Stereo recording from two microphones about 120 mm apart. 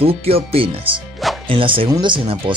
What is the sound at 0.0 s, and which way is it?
Speech, 55° right (ahead or behind).